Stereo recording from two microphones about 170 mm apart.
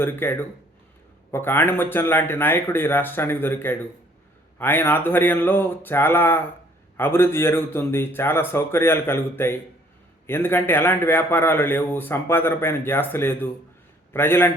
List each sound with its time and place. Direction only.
0.0 s a man's voice: 10° left (ahead or behind)